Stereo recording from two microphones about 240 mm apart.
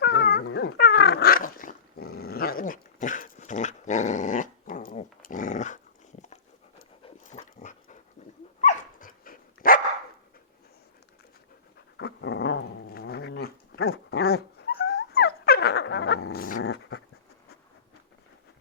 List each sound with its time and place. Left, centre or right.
0.0 s dog: left
7.0 s dog: left
11.9 s dog: left